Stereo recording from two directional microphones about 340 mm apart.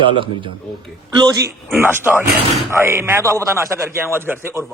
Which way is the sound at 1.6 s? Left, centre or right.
Centre.